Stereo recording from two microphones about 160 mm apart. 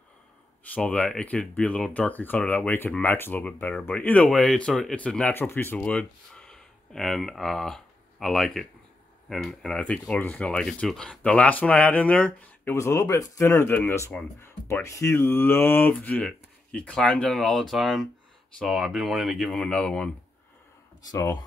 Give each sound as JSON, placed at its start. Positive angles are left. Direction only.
{"t": 0.7, "sound": "speech", "side_deg": 5}
{"t": 21.1, "sound": "speech", "side_deg": 20}